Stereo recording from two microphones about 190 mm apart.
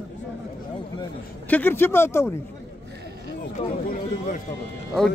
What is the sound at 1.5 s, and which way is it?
Speech, 10° left (ahead or behind).